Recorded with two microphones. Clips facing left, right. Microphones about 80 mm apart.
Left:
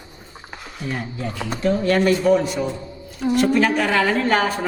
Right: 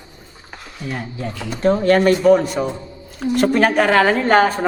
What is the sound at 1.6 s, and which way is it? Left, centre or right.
A woman's voice, right.